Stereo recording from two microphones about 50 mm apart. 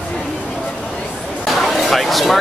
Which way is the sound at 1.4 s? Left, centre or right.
Centre.